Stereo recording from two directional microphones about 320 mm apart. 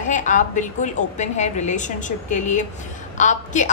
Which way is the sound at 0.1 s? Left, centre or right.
Left.